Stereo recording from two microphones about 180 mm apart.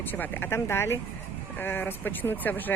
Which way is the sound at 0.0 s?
10° left (ahead or behind).